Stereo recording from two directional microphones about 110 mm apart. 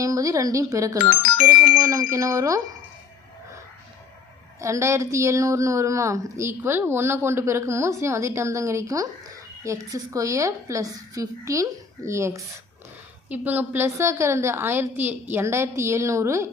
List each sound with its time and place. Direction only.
0.0 s a woman's voice: 30° right (ahead or behind)
4.6 s a woman's voice: 25° right (ahead or behind)
13.3 s a woman's voice: 15° right (ahead or behind)